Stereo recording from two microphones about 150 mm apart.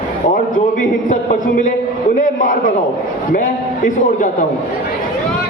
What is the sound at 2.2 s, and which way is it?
A man's voice, 60° left (ahead or behind).